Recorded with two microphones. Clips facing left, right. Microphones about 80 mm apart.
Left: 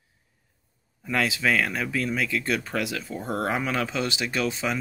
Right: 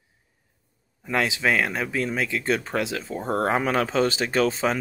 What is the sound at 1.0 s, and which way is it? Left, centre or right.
Speech, right.